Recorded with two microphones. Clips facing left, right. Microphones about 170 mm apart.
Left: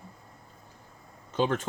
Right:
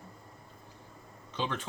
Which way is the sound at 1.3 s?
45° left (ahead or behind).